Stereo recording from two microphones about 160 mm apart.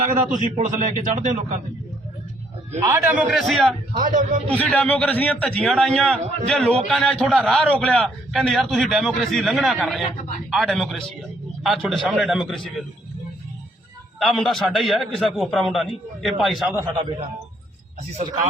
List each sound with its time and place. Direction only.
0.3 s speech: 50° right (ahead or behind)
2.7 s a man's voice: 15° right (ahead or behind); by 3.7 s centre (ahead or behind)
3.9 s speech: 55° right (ahead or behind)
4.5 s a man's voice: 10° left (ahead or behind)
14.2 s a man's voice: centre (ahead or behind)
16.7 s a man's voice: 30° right (ahead or behind)